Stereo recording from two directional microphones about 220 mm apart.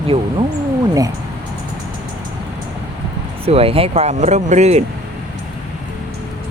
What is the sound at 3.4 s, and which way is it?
Speech, 25° right (ahead or behind).